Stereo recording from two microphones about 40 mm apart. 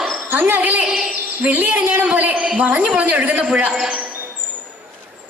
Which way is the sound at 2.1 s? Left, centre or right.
Right.